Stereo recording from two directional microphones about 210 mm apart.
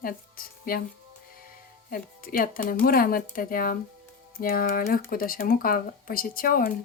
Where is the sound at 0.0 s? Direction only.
45° left (ahead or behind).